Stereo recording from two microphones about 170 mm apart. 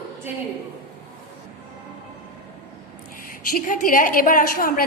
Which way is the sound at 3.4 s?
55° left (ahead or behind).